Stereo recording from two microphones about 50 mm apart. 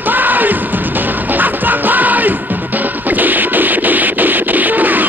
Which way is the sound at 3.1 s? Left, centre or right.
Right.